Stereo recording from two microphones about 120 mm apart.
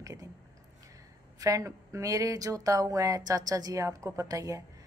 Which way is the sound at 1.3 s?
30° right (ahead or behind).